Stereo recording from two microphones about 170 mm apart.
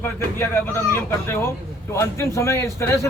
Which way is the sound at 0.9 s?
15° left (ahead or behind).